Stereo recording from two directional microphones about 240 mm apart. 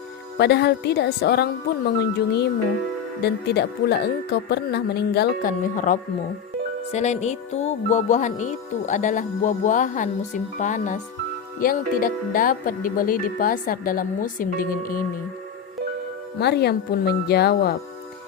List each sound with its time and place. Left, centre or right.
0.3 s speech: left
16.4 s speech: left